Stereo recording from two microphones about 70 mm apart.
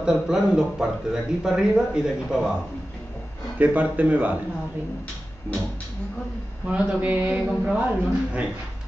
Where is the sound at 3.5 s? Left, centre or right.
Right.